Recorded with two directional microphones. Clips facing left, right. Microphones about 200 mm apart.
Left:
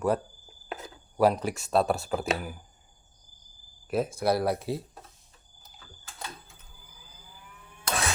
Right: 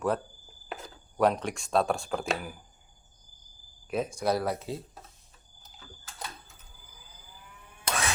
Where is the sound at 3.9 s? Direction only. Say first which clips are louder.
Left 2 dB; 5° left (ahead or behind).